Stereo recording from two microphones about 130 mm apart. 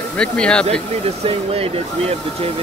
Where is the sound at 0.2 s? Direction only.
5° left (ahead or behind).